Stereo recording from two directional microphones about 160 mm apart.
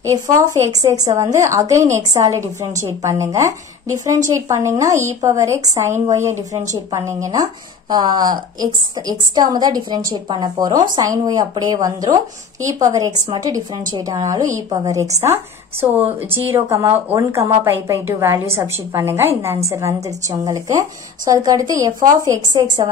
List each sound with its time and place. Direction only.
0.0 s speech: 20° right (ahead or behind)
13.3 s a woman's voice: 25° right (ahead or behind)